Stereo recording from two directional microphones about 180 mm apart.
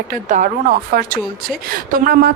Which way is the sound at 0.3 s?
45° right (ahead or behind).